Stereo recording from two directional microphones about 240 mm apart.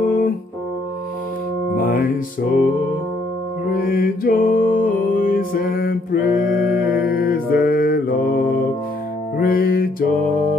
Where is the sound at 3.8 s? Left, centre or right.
Left.